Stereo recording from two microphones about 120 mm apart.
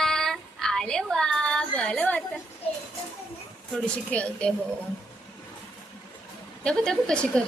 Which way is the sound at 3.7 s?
10° left (ahead or behind).